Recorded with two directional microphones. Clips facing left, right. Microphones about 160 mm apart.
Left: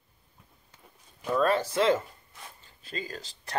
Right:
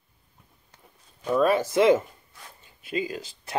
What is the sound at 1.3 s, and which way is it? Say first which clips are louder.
Speech: right 4 dB; 10° right (ahead or behind).